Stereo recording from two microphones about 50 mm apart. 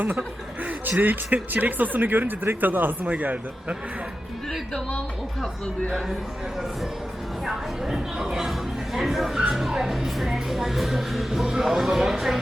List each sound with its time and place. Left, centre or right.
0.0 s speech: right
7.4 s speech: centre